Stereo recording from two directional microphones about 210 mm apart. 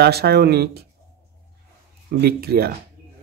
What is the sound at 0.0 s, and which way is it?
Speech, 50° right (ahead or behind).